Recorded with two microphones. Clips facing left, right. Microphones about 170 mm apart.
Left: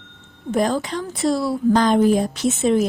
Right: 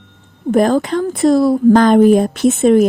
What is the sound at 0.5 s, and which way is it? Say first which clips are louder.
A woman's voice: right 7 dB; 55° right (ahead or behind).